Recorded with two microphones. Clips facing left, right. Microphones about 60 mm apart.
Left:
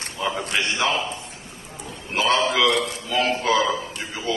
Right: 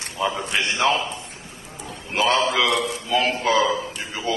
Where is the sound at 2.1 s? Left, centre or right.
Right.